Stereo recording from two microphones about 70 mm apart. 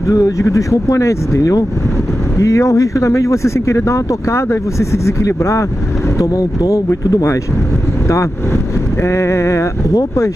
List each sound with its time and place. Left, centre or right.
0.0 s speech: left
6.1 s speech: left
9.0 s speech: left